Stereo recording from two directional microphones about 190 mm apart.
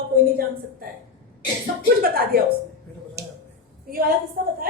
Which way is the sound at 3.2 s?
60° right (ahead or behind).